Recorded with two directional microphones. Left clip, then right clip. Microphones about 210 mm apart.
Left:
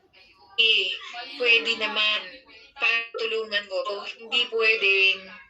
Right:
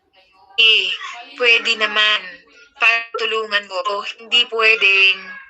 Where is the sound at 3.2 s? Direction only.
15° right (ahead or behind).